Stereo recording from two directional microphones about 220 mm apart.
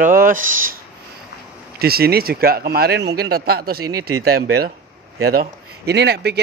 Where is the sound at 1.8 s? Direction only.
45° right (ahead or behind).